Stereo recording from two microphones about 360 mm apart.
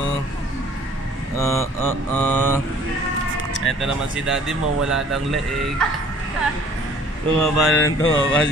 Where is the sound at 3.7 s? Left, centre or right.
Centre.